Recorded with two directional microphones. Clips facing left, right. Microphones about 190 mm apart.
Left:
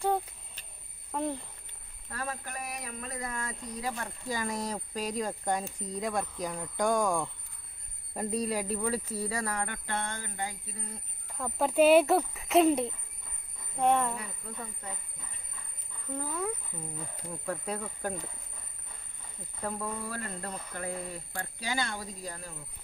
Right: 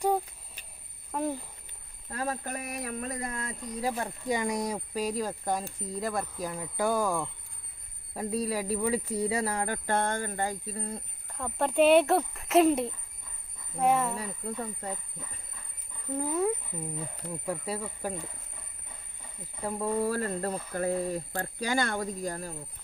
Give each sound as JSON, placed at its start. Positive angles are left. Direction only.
{"t": 0.0, "sound": "a sound", "side_deg": -10}
{"t": 2.0, "sound": "cricket", "side_deg": -25}
{"t": 2.3, "sound": "a sound", "side_deg": -50}
{"t": 3.2, "sound": "a sound", "side_deg": -35}
{"t": 4.0, "sound": "speech", "side_deg": -20}
{"t": 11.3, "sound": "speech", "side_deg": 0}
{"t": 14.2, "sound": "speech", "side_deg": -35}
{"t": 16.1, "sound": "speech", "side_deg": -20}
{"t": 17.4, "sound": "speech", "side_deg": -10}
{"t": 20.0, "sound": "speech", "side_deg": -40}